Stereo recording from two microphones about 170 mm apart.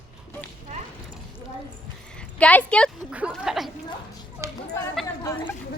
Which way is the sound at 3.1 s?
5° right (ahead or behind).